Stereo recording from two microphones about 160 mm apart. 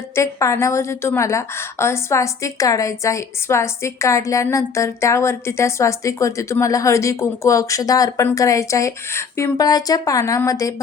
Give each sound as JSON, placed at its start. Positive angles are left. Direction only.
{"t": 0.2, "sound": "a woman's voice", "side_deg": 20}